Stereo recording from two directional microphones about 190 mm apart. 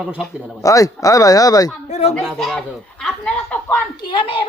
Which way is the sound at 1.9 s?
35° left (ahead or behind).